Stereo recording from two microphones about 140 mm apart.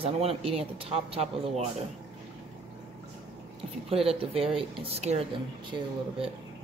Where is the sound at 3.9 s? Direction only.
45° right (ahead or behind).